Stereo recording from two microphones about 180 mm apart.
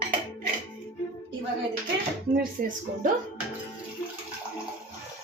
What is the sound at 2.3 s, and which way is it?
Speech, 50° right (ahead or behind).